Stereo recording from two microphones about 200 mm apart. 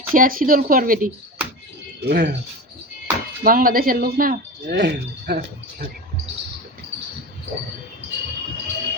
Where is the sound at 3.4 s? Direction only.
45° right (ahead or behind).